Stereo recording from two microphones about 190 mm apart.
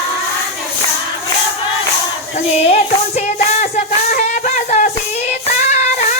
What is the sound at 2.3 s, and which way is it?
Music, 35° left (ahead or behind).